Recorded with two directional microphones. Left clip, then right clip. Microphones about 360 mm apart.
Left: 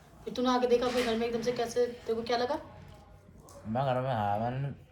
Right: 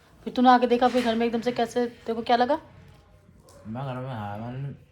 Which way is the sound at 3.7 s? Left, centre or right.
Centre.